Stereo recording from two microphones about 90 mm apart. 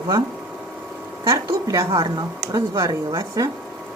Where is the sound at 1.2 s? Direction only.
40° right (ahead or behind).